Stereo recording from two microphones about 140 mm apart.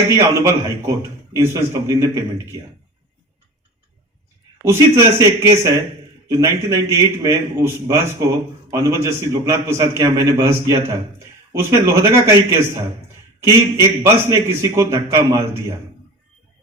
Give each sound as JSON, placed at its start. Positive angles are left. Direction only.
{"t": 0.1, "sound": "a man's voice", "side_deg": -20}
{"t": 4.6, "sound": "a man's voice", "side_deg": -20}